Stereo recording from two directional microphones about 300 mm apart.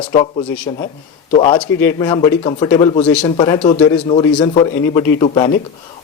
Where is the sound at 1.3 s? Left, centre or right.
Centre.